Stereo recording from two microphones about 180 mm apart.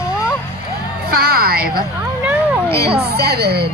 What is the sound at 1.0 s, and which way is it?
Speech, 55° right (ahead or behind).